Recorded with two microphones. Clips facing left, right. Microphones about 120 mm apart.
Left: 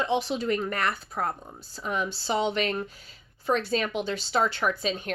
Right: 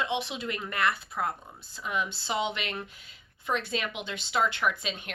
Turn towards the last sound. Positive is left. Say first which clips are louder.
# left 3 dB
turn(degrees=35)  # may be behind; listen again after turning